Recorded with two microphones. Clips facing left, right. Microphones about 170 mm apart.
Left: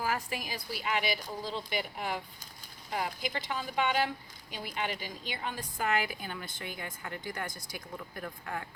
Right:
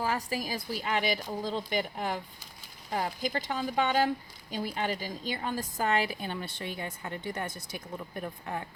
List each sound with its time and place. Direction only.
0.0 s a woman's voice: 35° right (ahead or behind)